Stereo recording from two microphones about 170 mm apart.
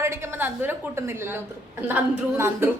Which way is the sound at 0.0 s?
15° right (ahead or behind).